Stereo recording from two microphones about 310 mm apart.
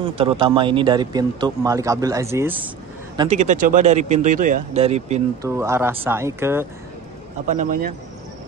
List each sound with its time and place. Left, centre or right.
0.0 s speech: centre
3.2 s speech: right
5.5 s speech: centre
7.4 s speech: right